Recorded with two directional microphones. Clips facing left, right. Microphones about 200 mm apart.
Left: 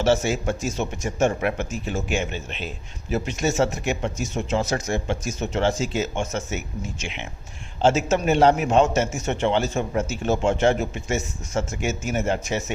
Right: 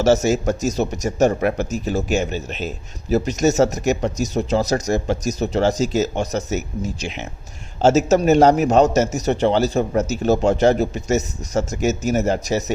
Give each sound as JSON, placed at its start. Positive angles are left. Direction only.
{"t": 0.0, "sound": "a man's voice", "side_deg": -40}